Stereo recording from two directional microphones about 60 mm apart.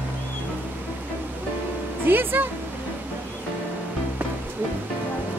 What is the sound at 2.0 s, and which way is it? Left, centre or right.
Speech, right.